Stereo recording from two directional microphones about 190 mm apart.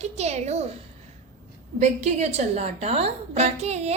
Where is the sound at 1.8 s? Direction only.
35° right (ahead or behind).